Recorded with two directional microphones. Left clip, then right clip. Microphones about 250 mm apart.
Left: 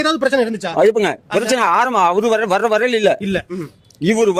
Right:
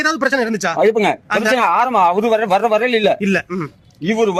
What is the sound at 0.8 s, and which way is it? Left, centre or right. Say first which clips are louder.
Speech: left 1 dB; left.